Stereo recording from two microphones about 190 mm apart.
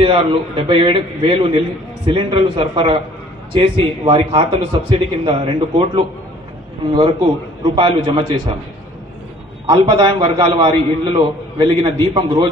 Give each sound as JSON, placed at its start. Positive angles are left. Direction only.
{"t": 0.0, "sound": "a man's voice", "side_deg": -25}
{"t": 9.7, "sound": "a man's voice", "side_deg": -25}